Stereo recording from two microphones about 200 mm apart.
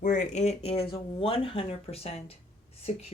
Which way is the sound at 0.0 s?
40° left (ahead or behind).